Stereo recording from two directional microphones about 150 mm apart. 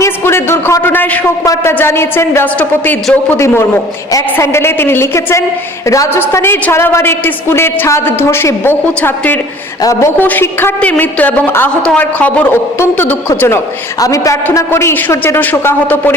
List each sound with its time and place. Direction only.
0.0 s a woman's voice: 15° left (ahead or behind)